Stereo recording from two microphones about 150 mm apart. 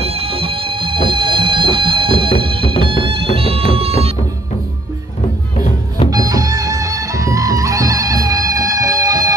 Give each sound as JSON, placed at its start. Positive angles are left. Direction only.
{"t": 0.0, "sound": "music", "side_deg": -40}
{"t": 6.0, "sound": "music", "side_deg": -25}